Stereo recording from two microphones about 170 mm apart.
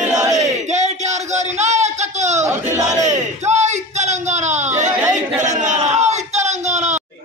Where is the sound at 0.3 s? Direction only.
45° right (ahead or behind).